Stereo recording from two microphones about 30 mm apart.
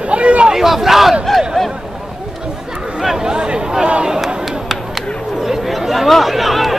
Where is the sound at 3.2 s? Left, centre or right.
Right.